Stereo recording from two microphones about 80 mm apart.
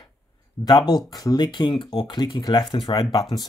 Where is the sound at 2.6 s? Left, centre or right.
Left.